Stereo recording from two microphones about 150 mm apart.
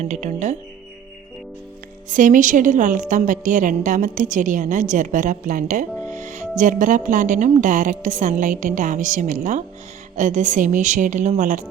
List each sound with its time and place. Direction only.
0.0 s speech: 50° right (ahead or behind)
2.0 s a woman's voice: 60° right (ahead or behind)